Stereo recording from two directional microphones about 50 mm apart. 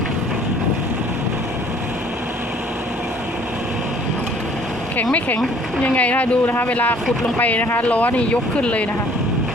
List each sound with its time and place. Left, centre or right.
5.8 s speech: left